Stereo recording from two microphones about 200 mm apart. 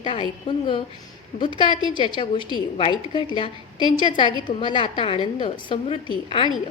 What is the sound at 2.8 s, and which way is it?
A woman's voice, 25° left (ahead or behind).